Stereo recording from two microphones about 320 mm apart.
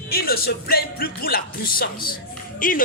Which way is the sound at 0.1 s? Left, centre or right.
Left.